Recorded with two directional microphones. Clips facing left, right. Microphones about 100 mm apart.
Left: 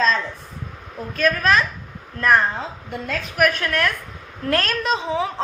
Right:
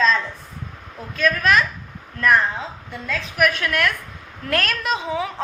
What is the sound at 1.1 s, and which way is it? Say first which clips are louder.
Speech: even; 35° left (ahead or behind).